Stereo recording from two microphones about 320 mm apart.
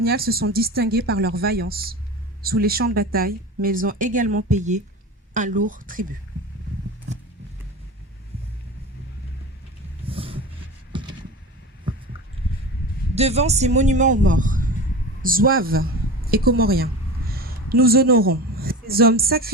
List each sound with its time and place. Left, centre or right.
0.0 s speech: right
10.1 s roaring cats: centre
10.9 s a sound: centre
13.1 s a woman's voice: centre